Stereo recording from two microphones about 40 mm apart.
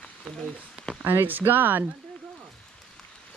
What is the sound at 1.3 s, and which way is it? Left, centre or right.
Speech, right.